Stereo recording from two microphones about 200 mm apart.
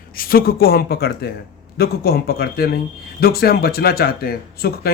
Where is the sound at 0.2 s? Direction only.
50° left (ahead or behind).